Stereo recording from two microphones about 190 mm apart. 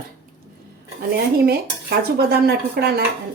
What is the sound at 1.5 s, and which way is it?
Speech, 55° right (ahead or behind).